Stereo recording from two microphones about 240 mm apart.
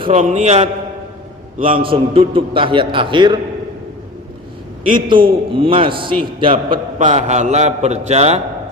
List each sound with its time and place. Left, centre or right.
0.0 s a man's voice: right
4.9 s a man's voice: centre